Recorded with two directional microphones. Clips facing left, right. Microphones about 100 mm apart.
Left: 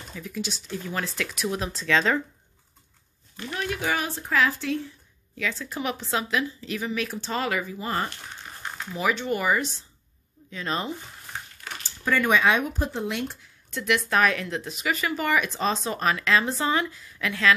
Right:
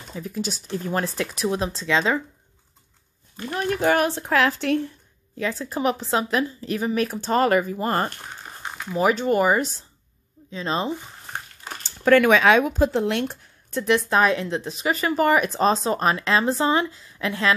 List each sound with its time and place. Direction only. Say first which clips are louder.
0.2 s speech: right 4 dB; 40° right (ahead or behind); by 2.2 s 15° right (ahead or behind)
3.4 s speech: right 7 dB; 40° right (ahead or behind); by 4.9 s 65° right (ahead or behind)
5.4 s speech: right 6 dB; 40° right (ahead or behind)
10.5 s speech: right 4 dB; 25° right (ahead or behind)
12.0 s speech: right 6 dB; 80° right
13.7 s speech: right 4 dB; 35° right (ahead or behind)